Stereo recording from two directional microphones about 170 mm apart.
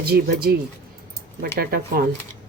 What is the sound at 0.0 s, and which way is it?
Speech, 70° right (ahead or behind).